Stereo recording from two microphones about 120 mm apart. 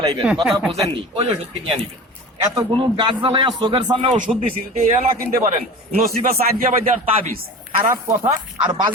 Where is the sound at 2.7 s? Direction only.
45° right (ahead or behind).